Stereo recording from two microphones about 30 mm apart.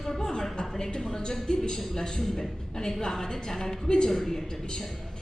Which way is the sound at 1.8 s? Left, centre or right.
Centre.